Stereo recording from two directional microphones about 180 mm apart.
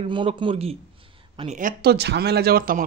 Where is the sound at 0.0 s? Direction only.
30° right (ahead or behind).